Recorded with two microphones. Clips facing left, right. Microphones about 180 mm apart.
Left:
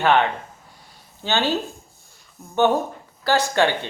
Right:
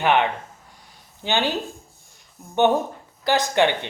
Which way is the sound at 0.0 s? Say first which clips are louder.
Left 1 dB; 15° right (ahead or behind).